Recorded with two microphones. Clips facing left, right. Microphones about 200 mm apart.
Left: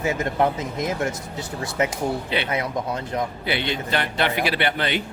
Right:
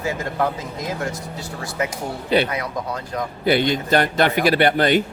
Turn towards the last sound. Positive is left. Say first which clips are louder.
# right 7 dB
turn(degrees=-45)  # may be behind; listen again after turning